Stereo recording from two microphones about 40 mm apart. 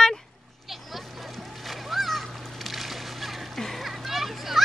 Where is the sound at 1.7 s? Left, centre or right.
Centre.